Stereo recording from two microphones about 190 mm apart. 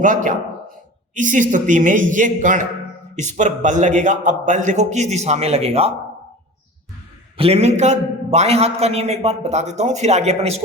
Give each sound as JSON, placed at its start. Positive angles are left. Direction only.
{"t": 0.0, "sound": "a man's voice", "side_deg": -45}
{"t": 7.3, "sound": "a man's voice", "side_deg": -30}